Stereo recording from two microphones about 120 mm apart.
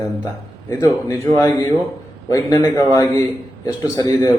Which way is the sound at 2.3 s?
25° left (ahead or behind).